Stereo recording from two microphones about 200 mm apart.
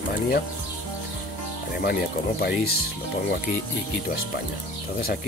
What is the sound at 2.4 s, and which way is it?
Speech, 50° left (ahead or behind).